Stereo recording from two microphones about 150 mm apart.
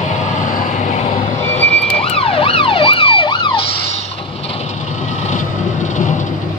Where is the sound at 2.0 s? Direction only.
40° left (ahead or behind).